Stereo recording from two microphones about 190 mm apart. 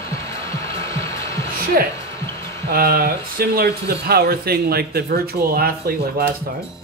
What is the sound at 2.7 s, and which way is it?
Speech, 50° right (ahead or behind).